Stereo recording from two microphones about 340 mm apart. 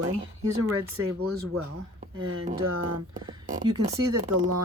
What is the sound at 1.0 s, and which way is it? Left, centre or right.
Speech, right.